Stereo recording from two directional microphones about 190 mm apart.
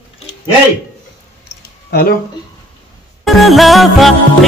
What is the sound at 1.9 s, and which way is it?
Speech, 55° left (ahead or behind).